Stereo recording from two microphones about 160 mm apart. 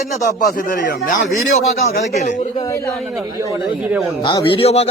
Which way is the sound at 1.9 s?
45° left (ahead or behind).